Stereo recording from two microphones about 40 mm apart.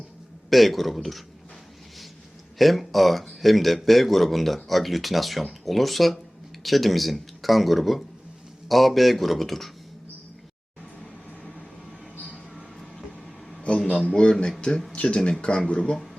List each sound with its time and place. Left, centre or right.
0.5 s a man's voice: centre
2.6 s a man's voice: centre
12.3 s mouse: centre
13.6 s a sound: left
14.2 s speech: left